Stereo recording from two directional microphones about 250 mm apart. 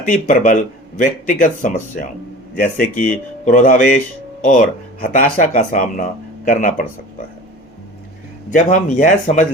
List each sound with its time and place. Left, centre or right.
0.0 s speech: left
8.5 s speech: left